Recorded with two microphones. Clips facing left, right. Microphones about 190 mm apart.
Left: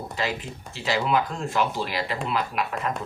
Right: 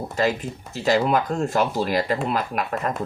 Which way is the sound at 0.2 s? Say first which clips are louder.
Right 7 dB; 45° right (ahead or behind).